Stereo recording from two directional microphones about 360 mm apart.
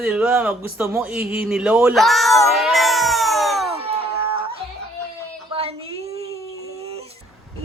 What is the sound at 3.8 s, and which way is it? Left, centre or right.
Cat, centre.